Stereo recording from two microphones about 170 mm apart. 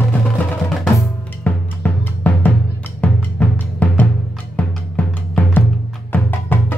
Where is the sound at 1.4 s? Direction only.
10° left (ahead or behind).